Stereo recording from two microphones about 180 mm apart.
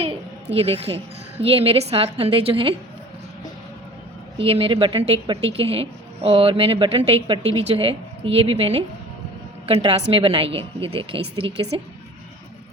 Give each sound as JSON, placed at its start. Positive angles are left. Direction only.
{"t": 0.5, "sound": "a woman's voice", "side_deg": -35}
{"t": 4.4, "sound": "a woman's voice", "side_deg": -30}